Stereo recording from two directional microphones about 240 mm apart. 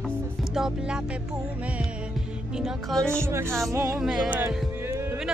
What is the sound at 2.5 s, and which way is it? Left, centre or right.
Speech, centre.